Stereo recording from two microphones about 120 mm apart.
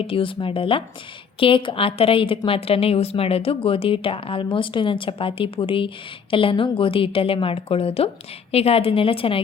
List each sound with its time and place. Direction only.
0.0 s speech: 45° left (ahead or behind)